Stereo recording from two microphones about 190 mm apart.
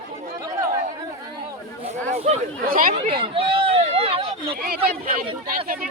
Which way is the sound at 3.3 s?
30° right (ahead or behind).